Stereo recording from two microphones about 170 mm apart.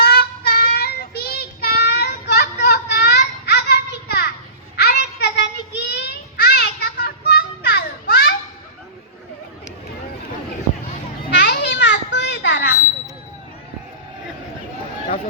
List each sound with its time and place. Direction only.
0.0 s child singing: 70° left (ahead or behind)
11.3 s children playing: 80° left